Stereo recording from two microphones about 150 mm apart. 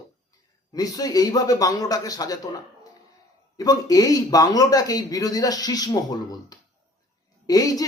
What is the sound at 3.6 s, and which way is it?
Speech, 25° left (ahead or behind).